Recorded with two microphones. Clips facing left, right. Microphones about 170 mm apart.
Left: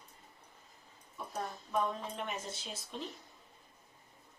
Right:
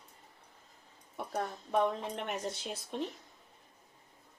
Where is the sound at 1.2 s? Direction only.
70° right (ahead or behind).